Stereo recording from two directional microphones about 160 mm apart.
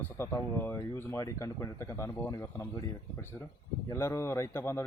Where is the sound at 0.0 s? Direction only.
15° left (ahead or behind).